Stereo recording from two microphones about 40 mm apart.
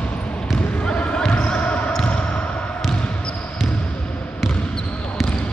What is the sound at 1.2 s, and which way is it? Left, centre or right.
Basketball bounce, left.